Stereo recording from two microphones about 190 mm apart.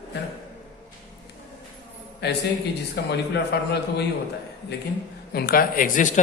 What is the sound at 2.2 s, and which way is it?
A man's voice, 60° left (ahead or behind).